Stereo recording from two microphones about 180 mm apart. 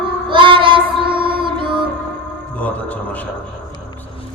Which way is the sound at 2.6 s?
10° left (ahead or behind).